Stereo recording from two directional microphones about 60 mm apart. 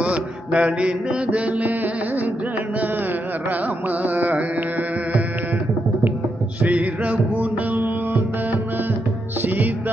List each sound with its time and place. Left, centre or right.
0.0 s mantra: right
1.7 s music: right
3.4 s carnatic music: right
6.6 s music: right